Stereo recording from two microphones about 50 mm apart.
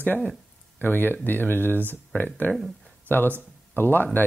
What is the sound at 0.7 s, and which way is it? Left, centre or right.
Speech, left.